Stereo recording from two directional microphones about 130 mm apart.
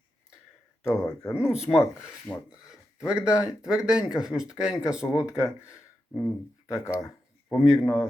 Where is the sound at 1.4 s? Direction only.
5° right (ahead or behind).